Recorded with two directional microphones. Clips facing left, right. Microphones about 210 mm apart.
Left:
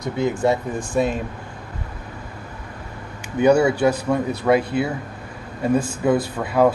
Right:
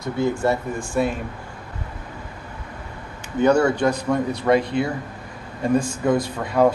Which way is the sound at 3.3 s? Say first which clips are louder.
Left 1 dB; 10° left (ahead or behind).